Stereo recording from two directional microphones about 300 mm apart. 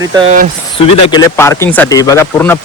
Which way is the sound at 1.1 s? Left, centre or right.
Centre.